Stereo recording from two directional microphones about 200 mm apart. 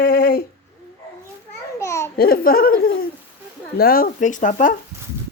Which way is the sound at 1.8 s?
15° left (ahead or behind).